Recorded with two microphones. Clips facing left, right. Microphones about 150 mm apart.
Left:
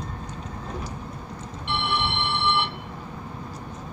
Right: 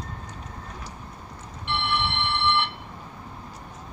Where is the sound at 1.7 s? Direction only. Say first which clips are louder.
Even; 15° left (ahead or behind).